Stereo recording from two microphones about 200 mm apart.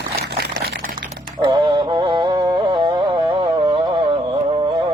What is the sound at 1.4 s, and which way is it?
Music, 20° right (ahead or behind).